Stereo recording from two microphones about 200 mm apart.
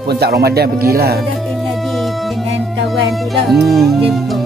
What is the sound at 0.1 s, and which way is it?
Speech, 55° right (ahead or behind).